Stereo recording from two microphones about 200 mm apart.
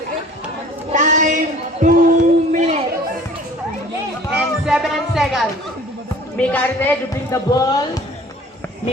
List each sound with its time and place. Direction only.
0.9 s a sound: 40° right (ahead or behind)
4.4 s music: 5° right (ahead or behind)
6.3 s speech: 10° left (ahead or behind)